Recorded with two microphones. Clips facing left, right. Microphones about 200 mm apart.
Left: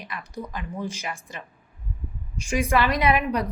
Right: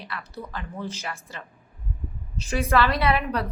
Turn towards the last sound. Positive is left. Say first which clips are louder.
# left 2 dB
turn(degrees=15)  # may be behind; listen again after turning